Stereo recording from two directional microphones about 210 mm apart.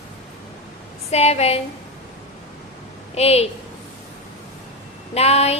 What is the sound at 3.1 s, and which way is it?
Speech, 30° left (ahead or behind).